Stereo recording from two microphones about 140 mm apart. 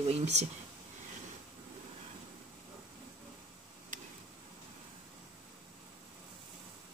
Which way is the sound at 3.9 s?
70° right (ahead or behind).